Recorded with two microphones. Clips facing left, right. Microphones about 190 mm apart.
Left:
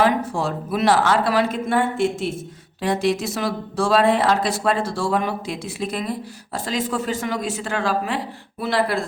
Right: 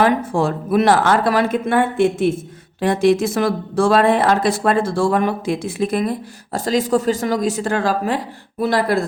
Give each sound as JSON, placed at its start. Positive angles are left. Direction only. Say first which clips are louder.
{"t": 0.3, "sound": "speech", "louder": "right 6 dB", "side_deg": -50}